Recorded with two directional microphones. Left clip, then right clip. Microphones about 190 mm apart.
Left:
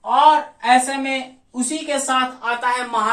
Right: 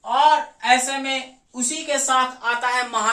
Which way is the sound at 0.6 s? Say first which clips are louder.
Left 3 dB; 20° right (ahead or behind).